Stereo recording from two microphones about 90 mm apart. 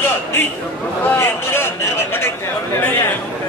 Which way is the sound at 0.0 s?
25° left (ahead or behind).